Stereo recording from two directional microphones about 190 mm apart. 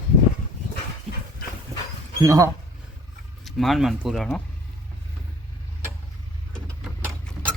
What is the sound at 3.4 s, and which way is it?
Speech, centre (ahead or behind).